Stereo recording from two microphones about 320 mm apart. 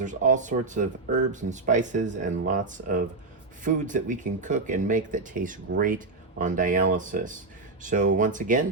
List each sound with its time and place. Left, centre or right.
0.0 s speech: right